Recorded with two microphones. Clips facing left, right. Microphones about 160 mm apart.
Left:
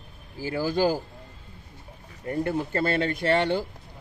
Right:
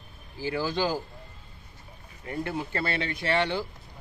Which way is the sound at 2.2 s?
45° left (ahead or behind).